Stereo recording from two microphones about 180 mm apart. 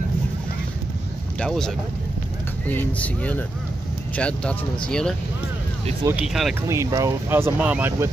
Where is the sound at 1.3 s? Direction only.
5° left (ahead or behind).